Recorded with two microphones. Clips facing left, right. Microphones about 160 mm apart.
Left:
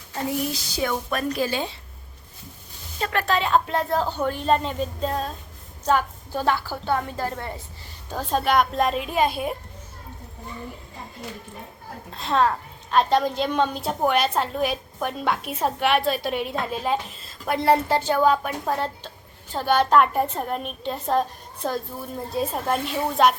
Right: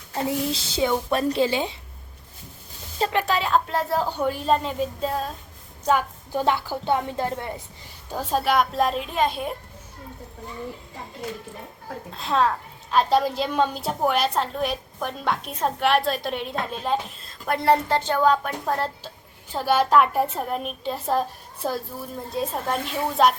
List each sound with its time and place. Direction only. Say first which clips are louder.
0.1 s a woman's voice: right 1 dB; 25° right (ahead or behind)
3.1 s speech: left 1 dB; 15° right (ahead or behind)
3.3 s a woman's voice: left 1 dB; centre (ahead or behind); by 7.6 s 20° right (ahead or behind)
8.1 s a woman's voice: left 1 dB; 10° right (ahead or behind)
12.1 s a woman's voice: left 1 dB; centre (ahead or behind)